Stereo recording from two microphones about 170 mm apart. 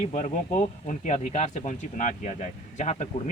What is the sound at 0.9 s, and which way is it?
Speech, 45° left (ahead or behind).